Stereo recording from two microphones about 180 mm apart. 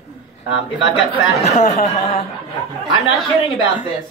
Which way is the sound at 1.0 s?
40° left (ahead or behind).